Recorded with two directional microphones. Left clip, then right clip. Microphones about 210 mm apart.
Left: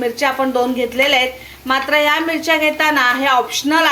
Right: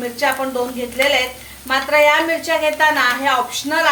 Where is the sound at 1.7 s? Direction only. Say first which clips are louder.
Right 1 dB; 30° left (ahead or behind).